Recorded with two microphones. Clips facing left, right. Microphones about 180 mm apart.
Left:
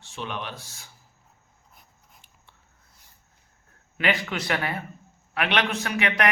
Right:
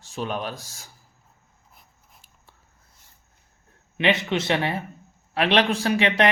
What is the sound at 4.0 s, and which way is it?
A man's voice, 25° right (ahead or behind).